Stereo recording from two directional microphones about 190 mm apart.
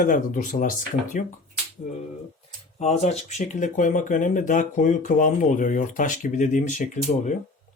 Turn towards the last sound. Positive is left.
turn(degrees=40)  # may be behind; listen again after turning